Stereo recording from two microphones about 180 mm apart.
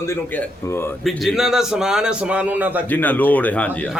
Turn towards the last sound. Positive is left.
turn(degrees=5)  # may be behind; listen again after turning